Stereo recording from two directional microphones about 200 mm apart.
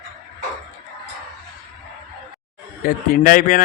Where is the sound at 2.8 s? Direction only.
45° left (ahead or behind).